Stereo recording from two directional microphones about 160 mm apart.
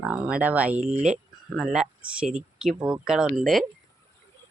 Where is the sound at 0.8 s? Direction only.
45° right (ahead or behind).